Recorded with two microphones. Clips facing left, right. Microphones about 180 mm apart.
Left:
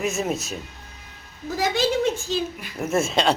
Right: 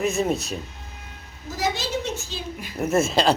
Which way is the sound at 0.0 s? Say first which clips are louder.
Right 2 dB; centre (ahead or behind).